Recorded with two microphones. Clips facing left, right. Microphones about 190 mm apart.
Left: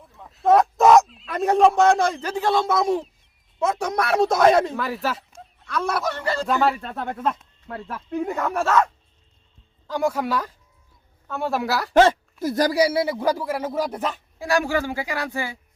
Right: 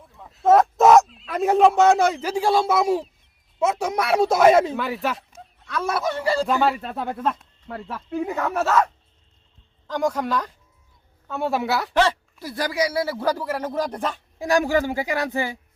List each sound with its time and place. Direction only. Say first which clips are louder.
0.0 s speech: right 1 dB; centre (ahead or behind)
9.8 s speech: even; 10° left (ahead or behind)
11.9 s speech: left 7 dB; 45° left (ahead or behind); by 14.2 s 5° left (ahead or behind)
14.3 s speech: right 3 dB; 20° right (ahead or behind)